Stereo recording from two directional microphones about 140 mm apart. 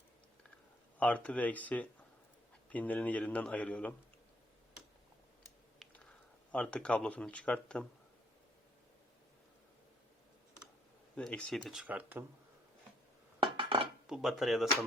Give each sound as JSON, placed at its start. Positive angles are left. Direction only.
{"t": 0.9, "sound": "speech", "side_deg": 10}
{"t": 6.5, "sound": "speech", "side_deg": 5}
{"t": 11.1, "sound": "speech", "side_deg": 10}
{"t": 11.7, "sound": "speech", "side_deg": -10}
{"t": 13.4, "sound": "dishes", "side_deg": -40}
{"t": 14.1, "sound": "speech", "side_deg": 0}